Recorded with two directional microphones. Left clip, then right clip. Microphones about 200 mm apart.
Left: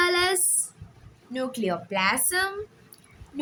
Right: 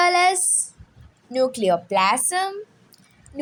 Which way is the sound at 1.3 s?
20° right (ahead or behind).